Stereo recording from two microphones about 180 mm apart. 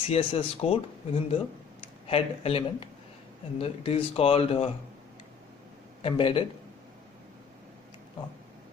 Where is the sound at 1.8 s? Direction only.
30° left (ahead or behind).